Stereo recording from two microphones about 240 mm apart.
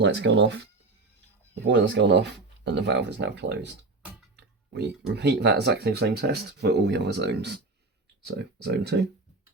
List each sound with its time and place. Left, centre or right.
0.0 s speech: right
1.6 s speech: right